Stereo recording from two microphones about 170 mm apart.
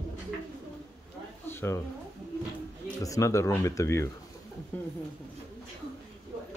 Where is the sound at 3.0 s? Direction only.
20° left (ahead or behind).